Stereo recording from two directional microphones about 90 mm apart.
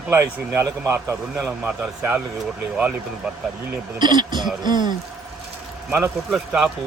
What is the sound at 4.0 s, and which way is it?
Speech, 55° right (ahead or behind).